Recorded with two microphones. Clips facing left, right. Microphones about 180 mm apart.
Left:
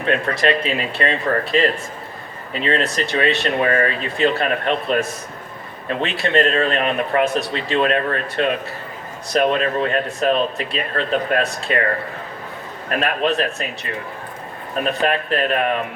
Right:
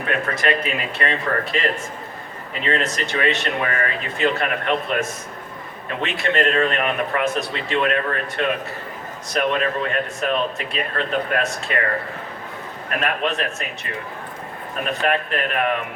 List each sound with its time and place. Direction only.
0.0 s a man's voice: 30° left (ahead or behind)
13.0 s a man's voice: 35° left (ahead or behind)
15.0 s a man's voice: 30° left (ahead or behind)